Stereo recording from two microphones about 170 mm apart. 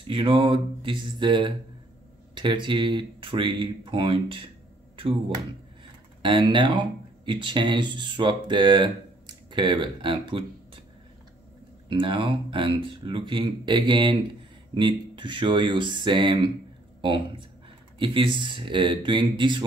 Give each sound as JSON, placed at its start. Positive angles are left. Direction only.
{"t": 0.0, "sound": "speech", "side_deg": -30}
{"t": 6.2, "sound": "speech", "side_deg": -30}
{"t": 11.9, "sound": "speech", "side_deg": -30}